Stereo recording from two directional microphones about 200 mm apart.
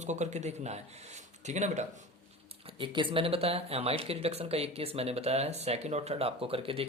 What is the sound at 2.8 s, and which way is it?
Speech, 25° right (ahead or behind).